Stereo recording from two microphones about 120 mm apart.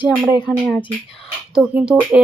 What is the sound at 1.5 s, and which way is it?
Speech, 5° right (ahead or behind).